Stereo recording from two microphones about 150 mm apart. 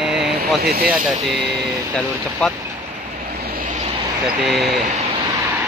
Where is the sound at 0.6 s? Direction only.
90° right.